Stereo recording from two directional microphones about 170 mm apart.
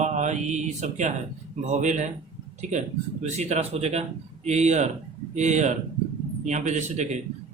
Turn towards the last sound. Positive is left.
turn(degrees=-45)  # may be behind; listen again after turning